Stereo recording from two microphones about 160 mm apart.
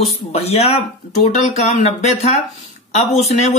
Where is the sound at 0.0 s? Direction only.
40° left (ahead or behind).